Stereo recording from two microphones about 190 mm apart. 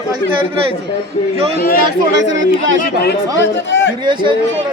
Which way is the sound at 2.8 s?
50° left (ahead or behind).